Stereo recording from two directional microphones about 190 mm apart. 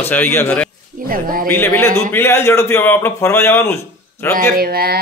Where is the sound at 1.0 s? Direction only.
50° right (ahead or behind).